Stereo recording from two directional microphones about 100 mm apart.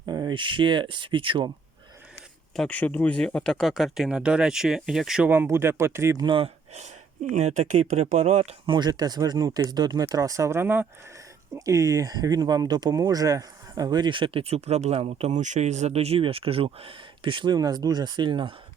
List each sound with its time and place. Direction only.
0.0 s speech: 45° right (ahead or behind)
2.6 s speech: 15° left (ahead or behind); by 5.2 s 5° right (ahead or behind)
5.2 s speech: 20° right (ahead or behind)
6.1 s speech: 55° right (ahead or behind)
7.4 s speech: 90° right
8.7 s speech: 45° right (ahead or behind); by 10.8 s 20° right (ahead or behind)
11.5 s speech: 35° right (ahead or behind); by 18.5 s 55° right (ahead or behind)